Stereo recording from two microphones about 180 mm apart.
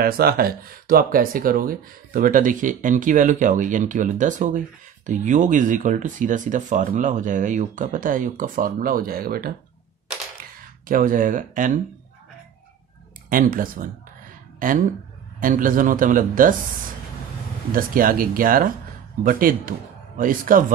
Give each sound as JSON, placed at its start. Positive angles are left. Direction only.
{"t": 0.0, "sound": "speech", "side_deg": -55}
{"t": 10.9, "sound": "speech", "side_deg": -50}
{"t": 13.3, "sound": "speech", "side_deg": -50}
{"t": 17.7, "sound": "speech", "side_deg": -50}